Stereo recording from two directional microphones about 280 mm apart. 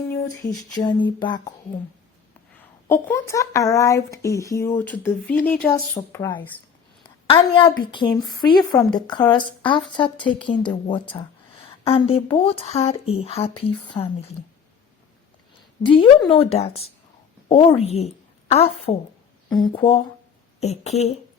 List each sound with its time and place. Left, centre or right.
0.7 s speech: centre
2.6 s speech: centre
7.0 s a sound: centre
7.9 s speech: centre
15.8 s a woman's voice: centre